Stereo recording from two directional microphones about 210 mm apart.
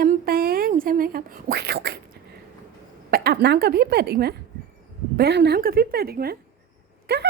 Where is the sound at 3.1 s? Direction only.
45° right (ahead or behind).